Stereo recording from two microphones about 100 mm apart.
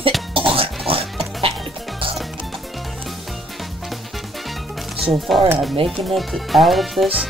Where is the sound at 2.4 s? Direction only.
Centre (ahead or behind).